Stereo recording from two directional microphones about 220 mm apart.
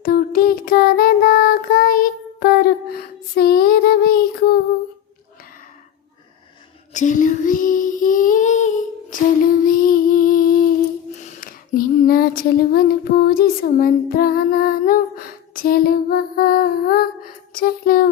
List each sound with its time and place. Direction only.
0.0 s a sound: 40° left (ahead or behind)
3.0 s child singing: 45° left (ahead or behind)
6.9 s female singing: 35° left (ahead or behind)